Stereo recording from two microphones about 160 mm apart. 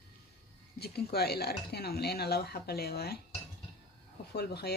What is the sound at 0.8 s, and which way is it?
Speech, 80° left.